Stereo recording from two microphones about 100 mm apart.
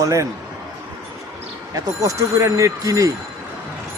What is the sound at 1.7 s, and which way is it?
A man's voice, 35° right (ahead or behind).